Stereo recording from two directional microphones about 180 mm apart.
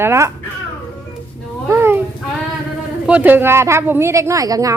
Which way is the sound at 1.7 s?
10° right (ahead or behind).